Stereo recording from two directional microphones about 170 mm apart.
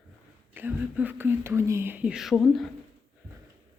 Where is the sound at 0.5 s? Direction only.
10° right (ahead or behind).